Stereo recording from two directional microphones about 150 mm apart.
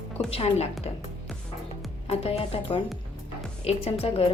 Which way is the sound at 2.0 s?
40° left (ahead or behind).